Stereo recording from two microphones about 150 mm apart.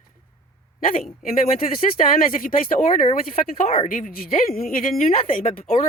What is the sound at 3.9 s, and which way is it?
Speech, 65° left (ahead or behind).